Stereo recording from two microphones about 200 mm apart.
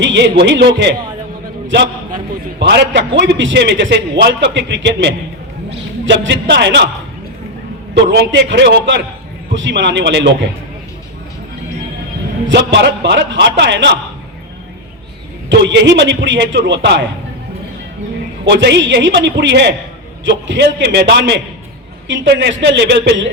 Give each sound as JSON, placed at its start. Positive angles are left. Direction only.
{"t": 0.0, "sound": "a man's voice", "side_deg": -60}
{"t": 8.0, "sound": "a man's voice", "side_deg": -60}
{"t": 12.5, "sound": "a man's voice", "side_deg": -60}
{"t": 15.4, "sound": "a man's voice", "side_deg": -60}
{"t": 18.4, "sound": "a man's voice", "side_deg": -60}